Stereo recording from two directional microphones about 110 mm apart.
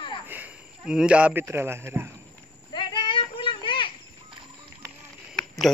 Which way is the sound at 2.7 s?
45° left (ahead or behind).